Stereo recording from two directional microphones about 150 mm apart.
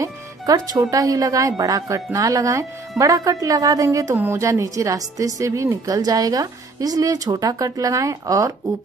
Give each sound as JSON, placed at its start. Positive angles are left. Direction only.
{"t": 0.0, "sound": "a woman's voice", "side_deg": -25}